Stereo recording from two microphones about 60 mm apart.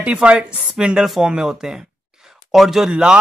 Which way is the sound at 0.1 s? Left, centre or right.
Centre.